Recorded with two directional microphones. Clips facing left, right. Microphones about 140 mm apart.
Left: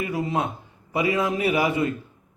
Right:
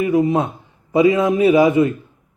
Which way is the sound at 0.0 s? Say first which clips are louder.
Right 9 dB; 20° right (ahead or behind).